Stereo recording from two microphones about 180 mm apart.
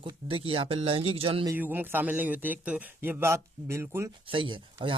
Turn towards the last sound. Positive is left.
turn(degrees=-25)  # may be behind; listen again after turning